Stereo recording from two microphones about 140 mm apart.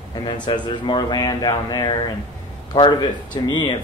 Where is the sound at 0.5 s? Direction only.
35° left (ahead or behind).